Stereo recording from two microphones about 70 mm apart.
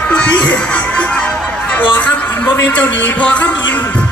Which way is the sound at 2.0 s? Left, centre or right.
Left.